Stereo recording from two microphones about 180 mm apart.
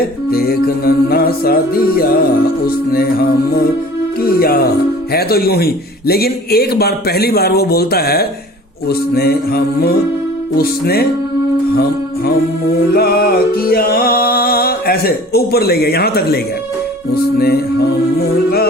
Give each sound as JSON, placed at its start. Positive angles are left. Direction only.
{"t": 0.0, "sound": "music", "side_deg": 55}
{"t": 12.9, "sound": "music", "side_deg": 55}